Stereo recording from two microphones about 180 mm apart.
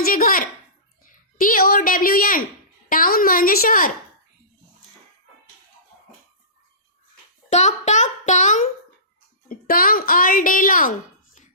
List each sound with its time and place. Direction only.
0.0 s a child's voice: 50° left (ahead or behind)
7.5 s a child's voice: 40° left (ahead or behind)